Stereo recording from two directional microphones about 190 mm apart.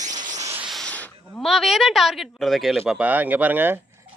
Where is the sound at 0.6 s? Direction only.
5° left (ahead or behind).